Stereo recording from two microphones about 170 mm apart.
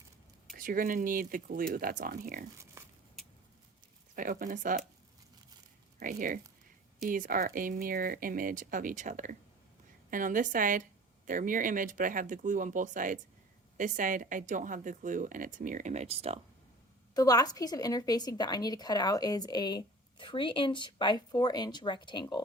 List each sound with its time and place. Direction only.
0.5 s speech: 55° right (ahead or behind)
2.8 s a sound: 15° right (ahead or behind)
4.1 s speech: 50° right (ahead or behind)
6.0 s speech: 50° right (ahead or behind); by 16.4 s 35° right (ahead or behind)
17.2 s a woman's voice: 20° left (ahead or behind)